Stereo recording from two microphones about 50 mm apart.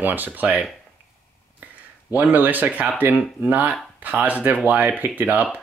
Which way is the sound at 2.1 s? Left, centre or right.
Right.